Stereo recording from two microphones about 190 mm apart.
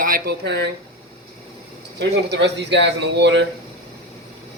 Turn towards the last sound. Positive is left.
turn(degrees=-70)  # may be behind; listen again after turning